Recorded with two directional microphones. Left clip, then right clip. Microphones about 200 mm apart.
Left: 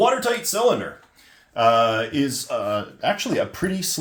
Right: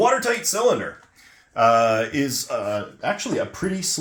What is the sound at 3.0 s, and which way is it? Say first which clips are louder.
Speech: left 3 dB; 10° left (ahead or behind).